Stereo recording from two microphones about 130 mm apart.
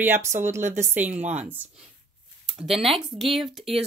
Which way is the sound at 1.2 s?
60° right (ahead or behind).